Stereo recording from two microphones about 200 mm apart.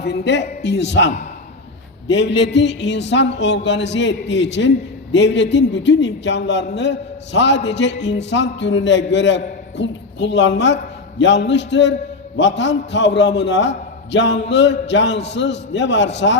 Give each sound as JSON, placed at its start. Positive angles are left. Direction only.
{"t": 0.0, "sound": "a man's voice", "side_deg": 60}